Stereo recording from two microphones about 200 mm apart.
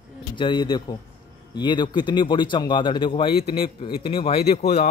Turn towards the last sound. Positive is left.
turn(degrees=35)  # may be behind; listen again after turning